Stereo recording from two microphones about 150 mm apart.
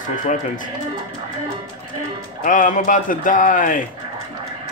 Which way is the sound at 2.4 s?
60° left (ahead or behind).